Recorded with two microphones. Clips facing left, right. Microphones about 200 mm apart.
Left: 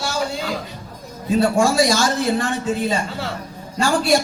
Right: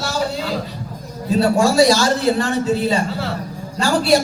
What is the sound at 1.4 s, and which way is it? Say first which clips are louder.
Speech: right 3 dB; 35° right (ahead or behind).